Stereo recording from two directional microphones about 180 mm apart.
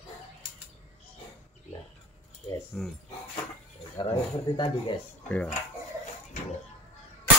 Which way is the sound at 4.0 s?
25° left (ahead or behind).